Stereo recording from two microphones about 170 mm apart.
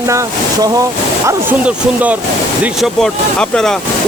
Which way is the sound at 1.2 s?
10° right (ahead or behind).